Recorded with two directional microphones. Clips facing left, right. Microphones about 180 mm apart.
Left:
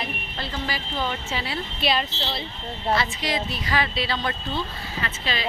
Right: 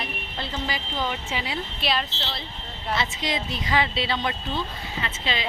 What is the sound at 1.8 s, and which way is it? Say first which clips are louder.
Speech: left 3 dB; centre (ahead or behind).